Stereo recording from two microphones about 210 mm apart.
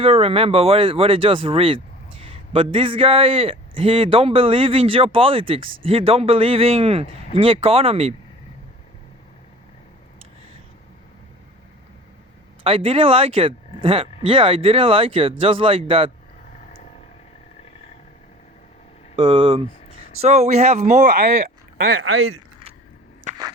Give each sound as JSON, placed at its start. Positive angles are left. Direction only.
{"t": 0.0, "sound": "a man's voice", "side_deg": -25}
{"t": 12.6, "sound": "a man's voice", "side_deg": -25}
{"t": 19.1, "sound": "a man's voice", "side_deg": -25}
{"t": 22.0, "sound": "speech", "side_deg": -90}
{"t": 23.3, "sound": "a sound", "side_deg": -35}